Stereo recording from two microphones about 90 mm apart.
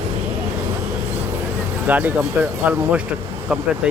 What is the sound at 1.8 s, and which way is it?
Speech, 20° right (ahead or behind).